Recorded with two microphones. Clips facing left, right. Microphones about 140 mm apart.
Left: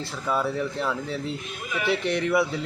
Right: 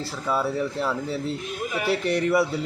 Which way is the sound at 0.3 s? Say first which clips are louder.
Right 1 dB; 5° right (ahead or behind).